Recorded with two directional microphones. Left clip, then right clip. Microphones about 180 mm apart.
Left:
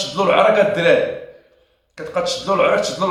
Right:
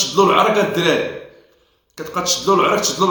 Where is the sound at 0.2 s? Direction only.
15° left (ahead or behind).